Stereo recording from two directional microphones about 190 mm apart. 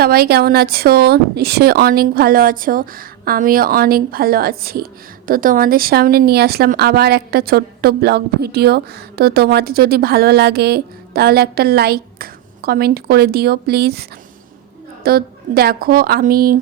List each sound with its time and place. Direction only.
0.0 s a woman's voice: 55° right (ahead or behind)